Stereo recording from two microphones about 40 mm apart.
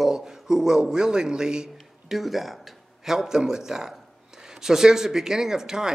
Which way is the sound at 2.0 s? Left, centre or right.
Centre.